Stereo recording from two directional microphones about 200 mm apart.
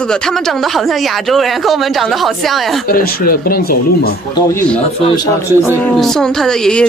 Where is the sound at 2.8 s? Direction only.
45° left (ahead or behind).